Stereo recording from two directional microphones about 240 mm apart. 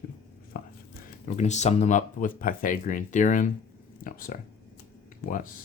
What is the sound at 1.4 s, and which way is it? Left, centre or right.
Speech, left.